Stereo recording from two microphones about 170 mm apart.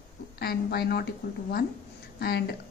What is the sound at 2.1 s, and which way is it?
Speech, 70° left (ahead or behind).